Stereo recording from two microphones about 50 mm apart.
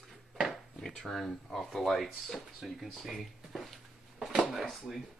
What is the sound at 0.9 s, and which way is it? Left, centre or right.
Speech, centre.